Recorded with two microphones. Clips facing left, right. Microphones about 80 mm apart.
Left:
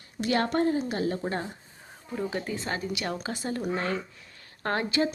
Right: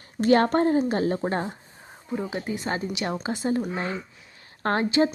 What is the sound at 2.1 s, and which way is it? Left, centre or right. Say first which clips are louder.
Speech: right 2 dB; right.